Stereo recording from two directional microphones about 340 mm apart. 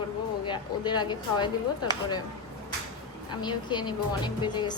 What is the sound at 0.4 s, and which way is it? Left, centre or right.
A woman's voice, centre.